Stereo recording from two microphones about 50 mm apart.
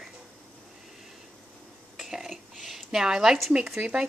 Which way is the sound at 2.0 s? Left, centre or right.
Centre.